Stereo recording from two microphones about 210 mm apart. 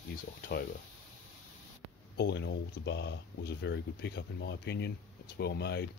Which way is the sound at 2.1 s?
55° left (ahead or behind).